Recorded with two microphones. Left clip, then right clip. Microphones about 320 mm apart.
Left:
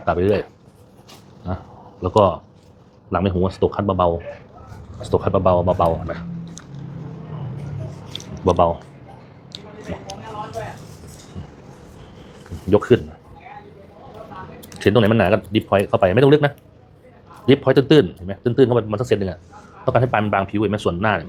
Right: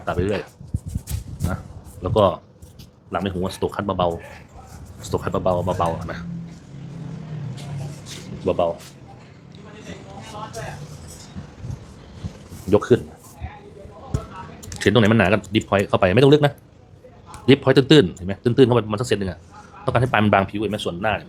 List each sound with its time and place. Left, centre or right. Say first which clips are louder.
0.2 s speech: left 5 dB; centre
2.0 s speech: left 2 dB; centre
3.1 s speech: left 5 dB; centre
3.6 s speech: left 3 dB; centre
8.4 s speech: left 4 dB; centre
12.7 s speech: left 2 dB; centre
14.7 s speech: left 1 dB; centre
20.2 s speech: right 2 dB; centre
20.5 s speech: left 4 dB; centre